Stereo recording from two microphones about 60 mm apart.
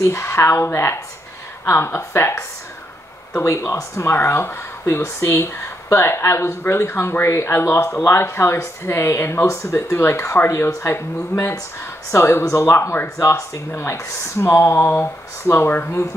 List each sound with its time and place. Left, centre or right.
0.0 s speech: left
3.4 s speech: left
4.1 s speech: left